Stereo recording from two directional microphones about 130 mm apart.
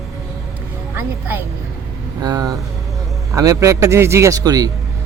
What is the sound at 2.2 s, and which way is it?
A man's voice, 30° right (ahead or behind).